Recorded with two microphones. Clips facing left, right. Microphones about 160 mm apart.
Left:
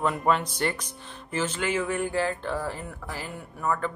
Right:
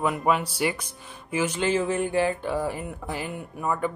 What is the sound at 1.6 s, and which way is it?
Speech, 25° right (ahead or behind).